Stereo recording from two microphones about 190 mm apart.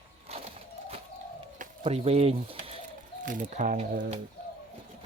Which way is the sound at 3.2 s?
45° right (ahead or behind).